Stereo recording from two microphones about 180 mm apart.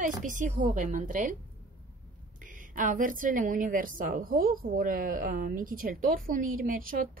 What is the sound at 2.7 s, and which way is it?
A woman's voice, 50° right (ahead or behind).